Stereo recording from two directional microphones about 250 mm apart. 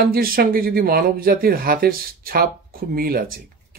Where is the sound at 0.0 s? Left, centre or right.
Right.